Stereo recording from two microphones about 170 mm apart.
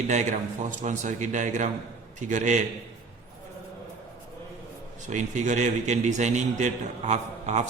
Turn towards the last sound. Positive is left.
turn(degrees=-45)  # may be behind; listen again after turning